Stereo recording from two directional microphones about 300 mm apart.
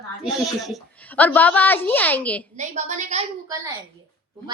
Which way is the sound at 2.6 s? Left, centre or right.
Right.